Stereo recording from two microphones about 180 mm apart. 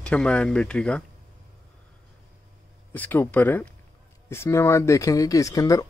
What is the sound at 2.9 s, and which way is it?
Speech, 10° left (ahead or behind).